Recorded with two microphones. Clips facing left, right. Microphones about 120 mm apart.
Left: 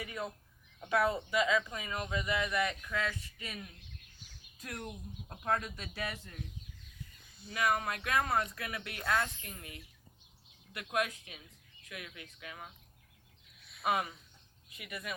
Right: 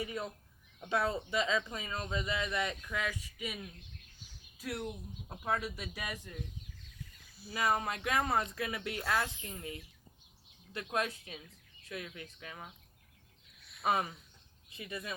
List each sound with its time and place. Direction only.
0.9 s speech: 30° right (ahead or behind); by 3.6 s 10° right (ahead or behind)
4.2 s a sound: 10° right (ahead or behind)
5.5 s speech: 10° right (ahead or behind)
7.5 s speech: 30° right (ahead or behind)
13.6 s a sound: centre (ahead or behind)
13.8 s speech: 30° right (ahead or behind)